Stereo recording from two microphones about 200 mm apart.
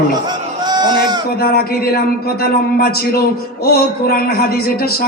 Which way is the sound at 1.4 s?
50° left (ahead or behind).